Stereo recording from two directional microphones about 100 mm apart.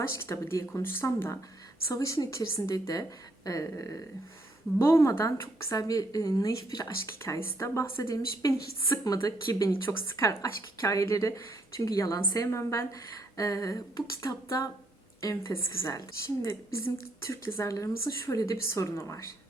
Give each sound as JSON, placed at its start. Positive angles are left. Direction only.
{"t": 0.1, "sound": "a woman's voice", "side_deg": 25}
{"t": 1.9, "sound": "a woman's voice", "side_deg": 35}
{"t": 8.1, "sound": "speech", "side_deg": 40}